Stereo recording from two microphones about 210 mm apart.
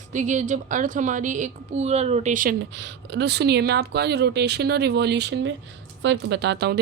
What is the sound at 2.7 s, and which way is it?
Speech, 55° right (ahead or behind).